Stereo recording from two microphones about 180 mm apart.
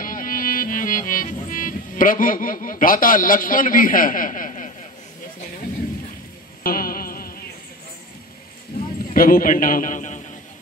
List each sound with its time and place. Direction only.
0.0 s music: 50° left (ahead or behind)
6.6 s music: 55° left (ahead or behind)
9.1 s a man's voice: 50° left (ahead or behind)